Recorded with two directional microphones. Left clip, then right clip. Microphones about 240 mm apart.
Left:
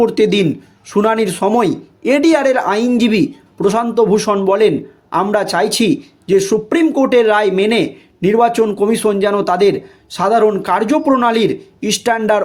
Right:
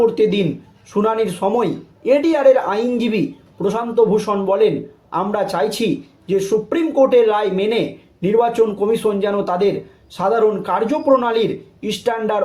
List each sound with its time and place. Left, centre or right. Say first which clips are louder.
0.0 s speech: left 3 dB; left